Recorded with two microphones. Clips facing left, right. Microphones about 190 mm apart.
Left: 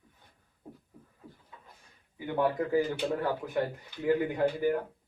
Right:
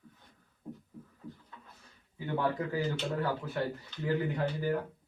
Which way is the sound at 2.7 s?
15° left (ahead or behind).